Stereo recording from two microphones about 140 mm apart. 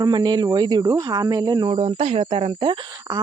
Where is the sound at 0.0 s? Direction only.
30° right (ahead or behind).